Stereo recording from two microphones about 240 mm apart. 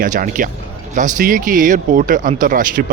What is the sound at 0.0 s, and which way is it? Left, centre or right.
A man's voice, right.